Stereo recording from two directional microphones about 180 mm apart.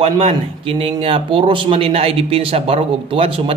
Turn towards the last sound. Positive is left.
turn(degrees=-30)  # may be behind; listen again after turning